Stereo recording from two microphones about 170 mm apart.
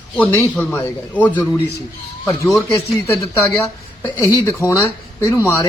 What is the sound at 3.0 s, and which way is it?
A man's voice, 15° left (ahead or behind).